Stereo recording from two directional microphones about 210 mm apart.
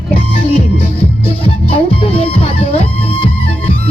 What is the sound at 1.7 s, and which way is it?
Music, 25° left (ahead or behind).